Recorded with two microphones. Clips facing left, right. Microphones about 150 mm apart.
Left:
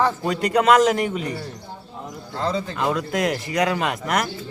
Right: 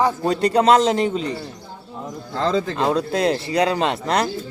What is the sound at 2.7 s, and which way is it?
Speech, 30° right (ahead or behind).